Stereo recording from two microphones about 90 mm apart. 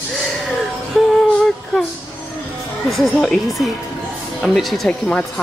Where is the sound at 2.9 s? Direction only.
5° left (ahead or behind).